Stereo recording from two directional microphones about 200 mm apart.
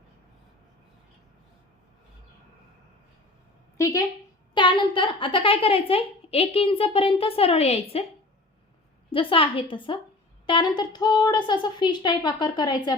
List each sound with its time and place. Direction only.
3.8 s a woman's voice: 15° left (ahead or behind); by 8.0 s 30° left (ahead or behind)
9.1 s a woman's voice: 25° left (ahead or behind)